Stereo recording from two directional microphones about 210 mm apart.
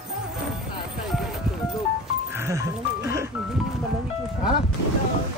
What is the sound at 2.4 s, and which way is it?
Music, 15° right (ahead or behind).